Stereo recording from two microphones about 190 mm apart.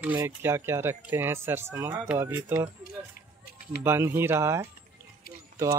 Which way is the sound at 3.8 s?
10° right (ahead or behind).